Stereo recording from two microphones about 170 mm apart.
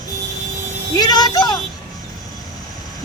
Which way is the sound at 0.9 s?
25° left (ahead or behind).